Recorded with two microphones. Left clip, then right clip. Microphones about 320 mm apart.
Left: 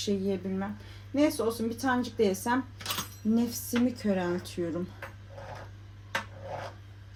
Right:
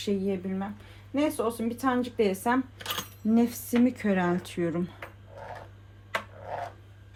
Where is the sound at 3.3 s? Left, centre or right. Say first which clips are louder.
Right 4 dB; right.